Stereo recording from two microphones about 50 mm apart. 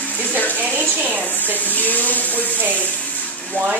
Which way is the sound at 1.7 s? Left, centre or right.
Left.